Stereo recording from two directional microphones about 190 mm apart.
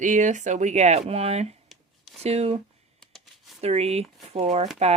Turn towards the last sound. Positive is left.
turn(degrees=-35)  # may be behind; listen again after turning